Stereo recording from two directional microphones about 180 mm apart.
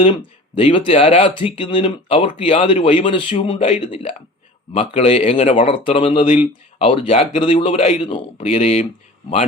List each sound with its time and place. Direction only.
0.0 s speech: 30° left (ahead or behind)